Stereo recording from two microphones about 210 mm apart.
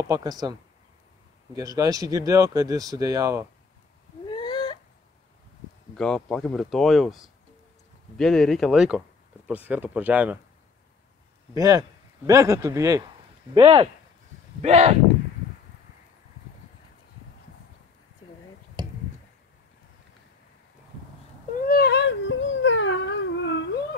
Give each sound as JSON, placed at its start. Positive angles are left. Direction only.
{"t": 0.0, "sound": "speech", "side_deg": -15}
{"t": 4.3, "sound": "a sound", "side_deg": 20}
{"t": 5.9, "sound": "speech", "side_deg": 5}
{"t": 11.5, "sound": "speech", "side_deg": -15}
{"t": 21.6, "sound": "dog", "side_deg": 45}